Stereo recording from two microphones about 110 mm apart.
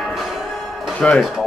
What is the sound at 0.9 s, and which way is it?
Speech, 10° left (ahead or behind).